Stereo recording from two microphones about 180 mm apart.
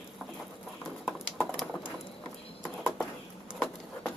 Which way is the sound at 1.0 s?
Centre (ahead or behind).